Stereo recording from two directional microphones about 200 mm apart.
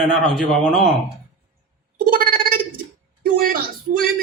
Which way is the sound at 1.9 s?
45° right (ahead or behind).